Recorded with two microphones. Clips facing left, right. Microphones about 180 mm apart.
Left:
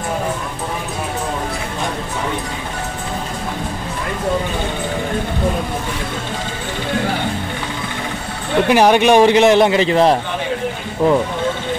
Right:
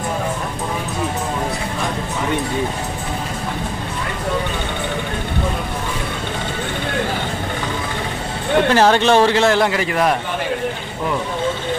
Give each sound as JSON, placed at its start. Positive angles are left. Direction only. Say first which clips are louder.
{"t": 8.6, "sound": "a man's voice", "louder": "left 3 dB", "side_deg": 15}